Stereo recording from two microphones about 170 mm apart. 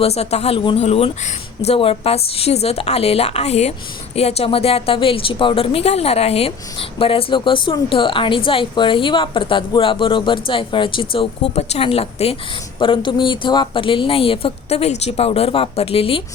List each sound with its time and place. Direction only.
0.0 s a woman's voice: 40° left (ahead or behind)